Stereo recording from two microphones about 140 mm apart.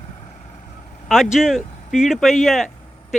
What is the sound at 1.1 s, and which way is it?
Speech, 5° right (ahead or behind).